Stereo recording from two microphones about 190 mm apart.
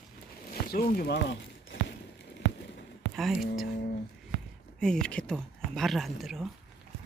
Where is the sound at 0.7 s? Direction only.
55° left (ahead or behind).